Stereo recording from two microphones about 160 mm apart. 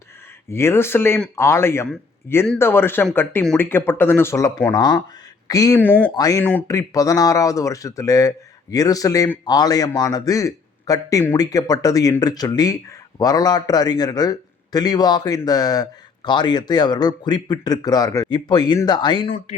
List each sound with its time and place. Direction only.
0.5 s a man's voice: 15° left (ahead or behind)
5.8 s speech: 10° left (ahead or behind)
6.1 s a man's voice: 25° left (ahead or behind)